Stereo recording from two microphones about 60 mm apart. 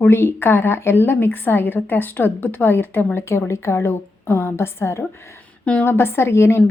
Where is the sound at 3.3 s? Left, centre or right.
Left.